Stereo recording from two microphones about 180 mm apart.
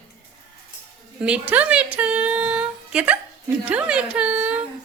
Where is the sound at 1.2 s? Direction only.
5° right (ahead or behind).